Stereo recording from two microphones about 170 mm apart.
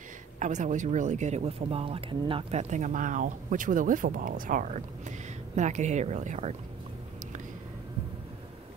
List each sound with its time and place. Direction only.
0.4 s speech: 45° right (ahead or behind)
2.7 s speech: 50° right (ahead or behind)